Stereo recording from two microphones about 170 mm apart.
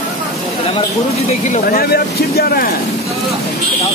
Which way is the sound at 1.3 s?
40° left (ahead or behind).